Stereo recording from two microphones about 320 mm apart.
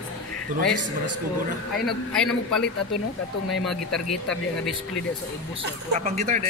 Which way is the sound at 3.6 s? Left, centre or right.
Centre.